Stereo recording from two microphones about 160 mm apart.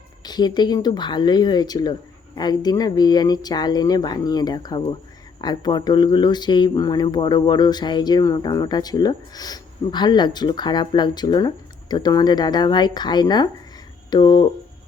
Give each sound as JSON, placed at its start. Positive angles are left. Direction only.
{"t": 0.3, "sound": "speech", "side_deg": 25}